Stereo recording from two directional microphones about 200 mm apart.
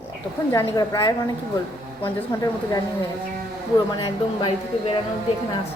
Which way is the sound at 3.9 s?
25° left (ahead or behind).